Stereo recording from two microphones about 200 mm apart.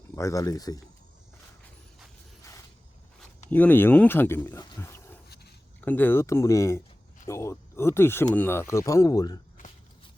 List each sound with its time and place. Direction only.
0.2 s speech: 15° left (ahead or behind)
3.5 s speech: 10° left (ahead or behind)